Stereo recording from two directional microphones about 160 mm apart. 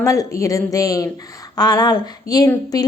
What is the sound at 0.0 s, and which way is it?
A woman's voice, 20° left (ahead or behind).